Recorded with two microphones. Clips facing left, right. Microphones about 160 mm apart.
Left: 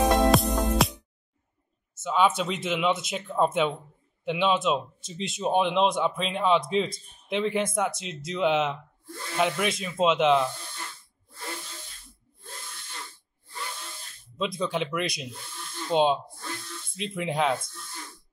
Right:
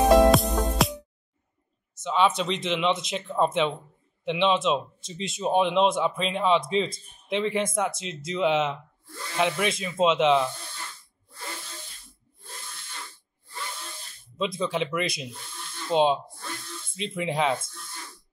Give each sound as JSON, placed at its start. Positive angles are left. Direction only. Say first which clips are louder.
{"t": 0.3, "sound": "music", "louder": "right 1 dB", "side_deg": 0}
{"t": 2.0, "sound": "speech", "louder": "even", "side_deg": 5}
{"t": 14.3, "sound": "speech", "louder": "right 1 dB", "side_deg": 0}